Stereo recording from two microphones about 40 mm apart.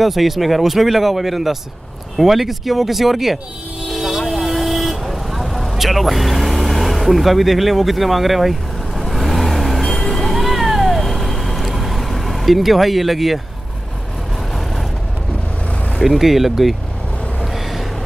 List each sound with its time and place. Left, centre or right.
0.0 s speech: centre
3.9 s vehicle: centre
16.0 s speech: centre
17.5 s a sound: centre